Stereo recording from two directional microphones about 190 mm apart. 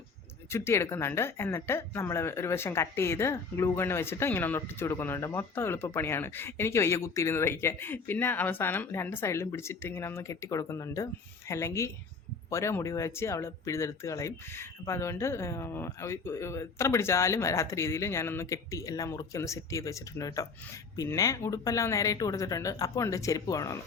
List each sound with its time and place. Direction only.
0.5 s speech: 15° left (ahead or behind)